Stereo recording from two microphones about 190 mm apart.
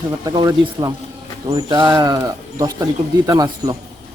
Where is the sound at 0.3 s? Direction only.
20° right (ahead or behind).